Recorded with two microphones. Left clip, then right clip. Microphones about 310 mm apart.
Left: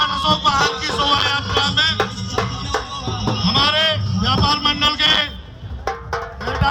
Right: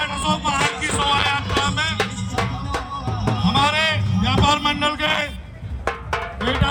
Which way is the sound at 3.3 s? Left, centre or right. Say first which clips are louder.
Left 2 dB; centre.